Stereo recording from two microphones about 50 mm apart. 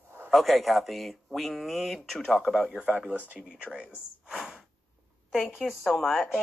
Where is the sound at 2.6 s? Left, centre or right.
Centre.